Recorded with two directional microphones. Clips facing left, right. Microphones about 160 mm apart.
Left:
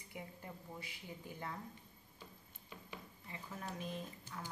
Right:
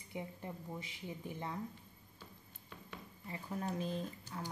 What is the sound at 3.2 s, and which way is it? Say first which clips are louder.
Speech: right 7 dB; 35° right (ahead or behind).